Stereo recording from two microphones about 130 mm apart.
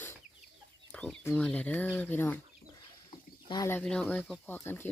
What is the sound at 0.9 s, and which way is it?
Speech, 10° left (ahead or behind).